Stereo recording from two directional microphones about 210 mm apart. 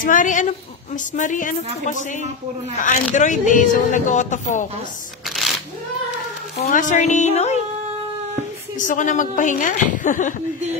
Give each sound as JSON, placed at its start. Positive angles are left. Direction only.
{"t": 0.0, "sound": "speech", "side_deg": 40}
{"t": 2.8, "sound": "speech", "side_deg": 35}
{"t": 6.6, "sound": "speech", "side_deg": 35}
{"t": 8.7, "sound": "speech", "side_deg": 35}